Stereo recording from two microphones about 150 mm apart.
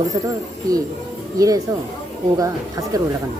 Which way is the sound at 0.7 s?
25° right (ahead or behind).